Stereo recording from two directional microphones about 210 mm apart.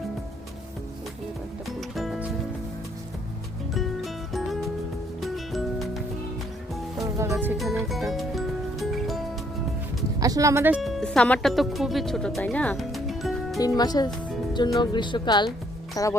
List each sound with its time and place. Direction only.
1.6 s music: centre (ahead or behind)
3.8 s music: centre (ahead or behind)
7.2 s music: 10° right (ahead or behind)
10.2 s speech: 15° right (ahead or behind)
10.8 s speech: centre (ahead or behind)
13.6 s speech: 20° left (ahead or behind)